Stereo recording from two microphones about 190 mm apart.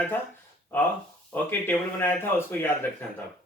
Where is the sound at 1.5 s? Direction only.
10° left (ahead or behind).